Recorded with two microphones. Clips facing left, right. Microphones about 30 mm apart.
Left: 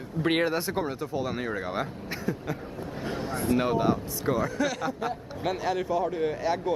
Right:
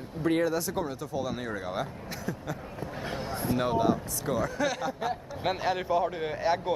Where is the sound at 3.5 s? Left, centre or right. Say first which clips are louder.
Left 1 dB; centre.